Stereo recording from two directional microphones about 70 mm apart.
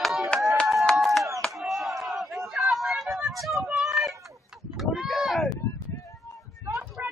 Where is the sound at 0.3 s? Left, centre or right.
Centre.